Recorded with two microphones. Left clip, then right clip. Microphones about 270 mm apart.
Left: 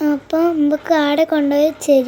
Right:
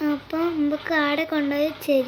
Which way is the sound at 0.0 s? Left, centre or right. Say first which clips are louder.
Left 8 dB; left.